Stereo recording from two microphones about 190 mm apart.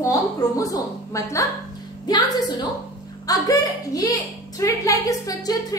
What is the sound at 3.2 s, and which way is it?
A woman's voice, 20° left (ahead or behind).